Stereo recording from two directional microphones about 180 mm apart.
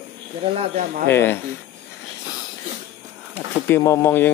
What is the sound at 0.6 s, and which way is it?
Speech, 40° right (ahead or behind).